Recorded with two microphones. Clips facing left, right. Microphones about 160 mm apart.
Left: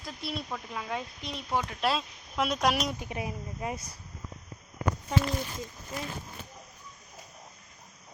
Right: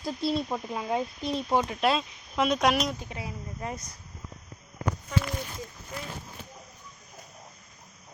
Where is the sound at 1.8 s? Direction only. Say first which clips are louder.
Right 4 dB; centre (ahead or behind).